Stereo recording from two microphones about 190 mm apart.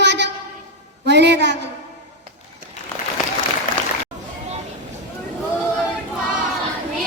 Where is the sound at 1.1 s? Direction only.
65° right (ahead or behind).